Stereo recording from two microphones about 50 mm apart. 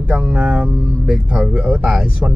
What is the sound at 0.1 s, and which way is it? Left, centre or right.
Speech, centre.